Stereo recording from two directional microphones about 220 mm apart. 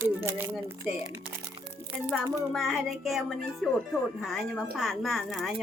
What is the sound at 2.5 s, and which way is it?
Speech, centre (ahead or behind).